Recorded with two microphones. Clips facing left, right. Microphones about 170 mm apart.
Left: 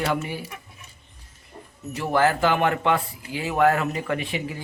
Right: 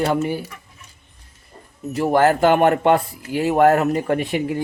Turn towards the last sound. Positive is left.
turn(degrees=-55)  # may be behind; listen again after turning